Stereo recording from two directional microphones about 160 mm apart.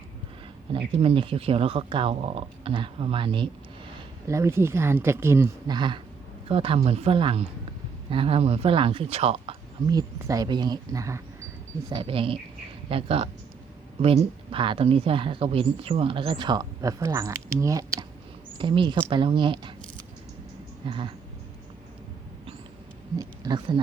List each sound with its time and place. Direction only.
0.9 s speech: 35° right (ahead or behind)
4.3 s speech: 15° right (ahead or behind)
5.6 s speech: 30° right (ahead or behind)
11.9 s speech: 30° right (ahead or behind)
18.5 s a woman's voice: 30° right (ahead or behind)
20.8 s speech: 30° right (ahead or behind)
23.1 s speech: 25° right (ahead or behind)